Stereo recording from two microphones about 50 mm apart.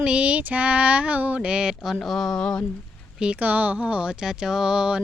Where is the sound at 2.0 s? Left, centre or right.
Centre.